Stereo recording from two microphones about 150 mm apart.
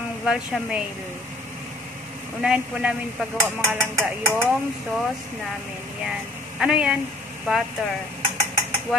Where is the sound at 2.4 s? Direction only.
5° right (ahead or behind).